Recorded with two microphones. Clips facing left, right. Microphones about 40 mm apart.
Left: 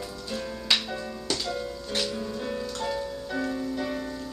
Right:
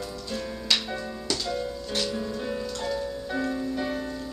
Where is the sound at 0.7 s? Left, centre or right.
Left.